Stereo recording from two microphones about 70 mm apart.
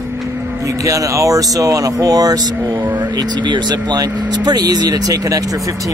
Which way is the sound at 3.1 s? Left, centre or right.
Right.